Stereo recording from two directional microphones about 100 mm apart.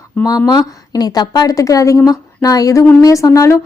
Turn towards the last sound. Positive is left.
turn(degrees=35)  # may be behind; listen again after turning